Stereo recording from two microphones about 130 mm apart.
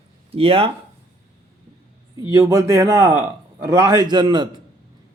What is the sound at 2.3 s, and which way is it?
A man's voice, 25° right (ahead or behind).